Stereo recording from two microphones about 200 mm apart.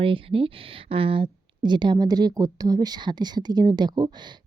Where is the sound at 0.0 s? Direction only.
25° right (ahead or behind).